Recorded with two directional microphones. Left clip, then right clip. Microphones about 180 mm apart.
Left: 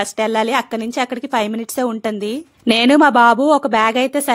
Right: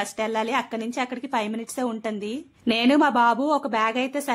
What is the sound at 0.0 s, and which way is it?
A woman's voice, 35° left (ahead or behind).